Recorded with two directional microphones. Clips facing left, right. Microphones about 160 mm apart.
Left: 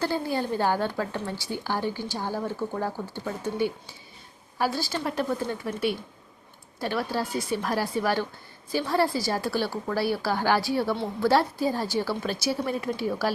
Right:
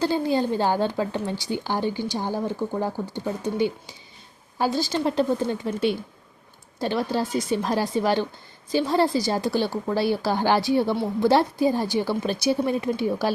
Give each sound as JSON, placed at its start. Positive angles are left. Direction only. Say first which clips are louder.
{"t": 0.0, "sound": "speech", "louder": "right 5 dB", "side_deg": -20}